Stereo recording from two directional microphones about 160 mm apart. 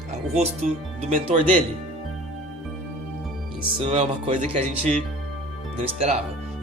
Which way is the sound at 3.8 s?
35° right (ahead or behind).